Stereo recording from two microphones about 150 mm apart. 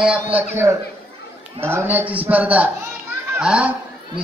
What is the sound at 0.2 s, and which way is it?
Speech, 15° right (ahead or behind).